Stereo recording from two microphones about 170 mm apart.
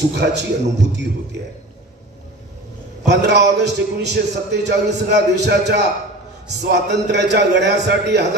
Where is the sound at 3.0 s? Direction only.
85° right.